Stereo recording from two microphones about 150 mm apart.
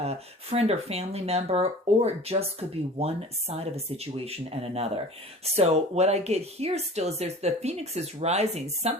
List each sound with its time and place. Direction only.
0.0 s speech: 45° right (ahead or behind)